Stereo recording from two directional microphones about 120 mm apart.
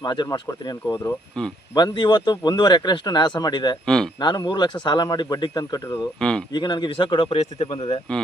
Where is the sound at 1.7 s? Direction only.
35° left (ahead or behind).